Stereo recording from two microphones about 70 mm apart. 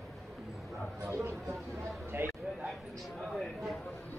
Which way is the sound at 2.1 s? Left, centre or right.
Right.